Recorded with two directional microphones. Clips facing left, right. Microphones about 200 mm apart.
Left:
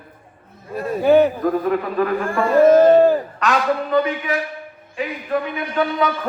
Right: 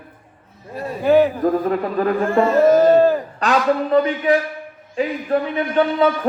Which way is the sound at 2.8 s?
15° left (ahead or behind).